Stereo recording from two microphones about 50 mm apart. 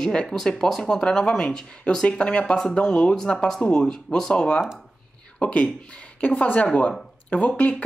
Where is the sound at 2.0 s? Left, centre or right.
Left.